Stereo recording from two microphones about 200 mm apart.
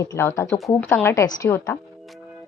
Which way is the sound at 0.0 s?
15° left (ahead or behind).